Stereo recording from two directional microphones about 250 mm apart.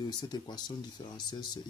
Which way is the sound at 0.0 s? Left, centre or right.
Centre.